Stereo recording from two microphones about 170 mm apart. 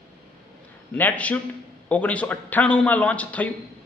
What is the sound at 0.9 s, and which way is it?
A woman's voice, 10° left (ahead or behind).